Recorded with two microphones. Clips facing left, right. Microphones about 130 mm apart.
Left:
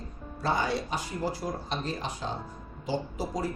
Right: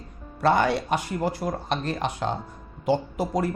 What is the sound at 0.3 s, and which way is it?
Speech, 65° right (ahead or behind).